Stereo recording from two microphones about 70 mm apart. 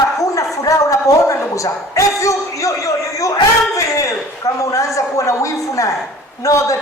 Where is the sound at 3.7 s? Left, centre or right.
Left.